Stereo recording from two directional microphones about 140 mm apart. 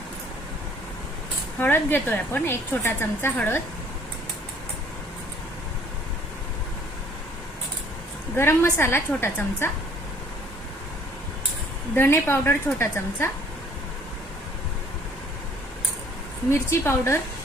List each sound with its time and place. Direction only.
1.5 s a woman's voice: 15° left (ahead or behind)
8.4 s a woman's voice: 15° left (ahead or behind)
11.9 s a woman's voice: 15° left (ahead or behind)
16.5 s a woman's voice: 15° left (ahead or behind)